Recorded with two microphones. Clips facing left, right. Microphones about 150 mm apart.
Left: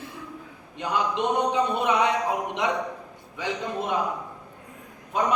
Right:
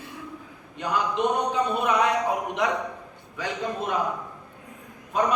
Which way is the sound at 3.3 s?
25° left (ahead or behind).